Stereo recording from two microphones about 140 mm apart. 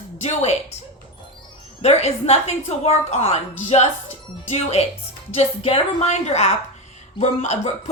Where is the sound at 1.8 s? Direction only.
50° left (ahead or behind).